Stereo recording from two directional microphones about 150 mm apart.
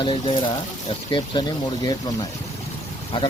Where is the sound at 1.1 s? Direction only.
30° left (ahead or behind).